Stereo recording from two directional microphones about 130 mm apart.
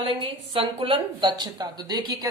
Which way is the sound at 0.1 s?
40° right (ahead or behind).